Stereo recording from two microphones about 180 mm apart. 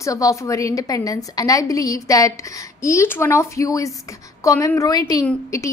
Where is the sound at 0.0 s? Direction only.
20° left (ahead or behind).